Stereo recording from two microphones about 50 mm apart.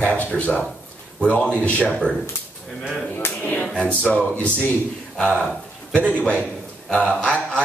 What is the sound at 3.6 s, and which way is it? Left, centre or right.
Speech, centre.